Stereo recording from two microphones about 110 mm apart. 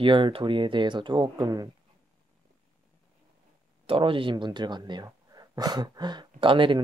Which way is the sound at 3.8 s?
55° right (ahead or behind).